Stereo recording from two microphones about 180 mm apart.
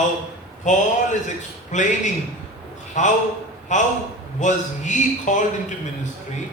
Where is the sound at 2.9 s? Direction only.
45° left (ahead or behind).